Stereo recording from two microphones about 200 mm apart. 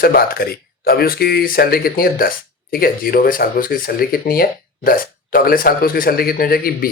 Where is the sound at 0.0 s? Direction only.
50° left (ahead or behind).